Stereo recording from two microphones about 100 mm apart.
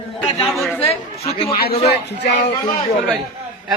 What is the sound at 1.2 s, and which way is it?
Speech, 80° left.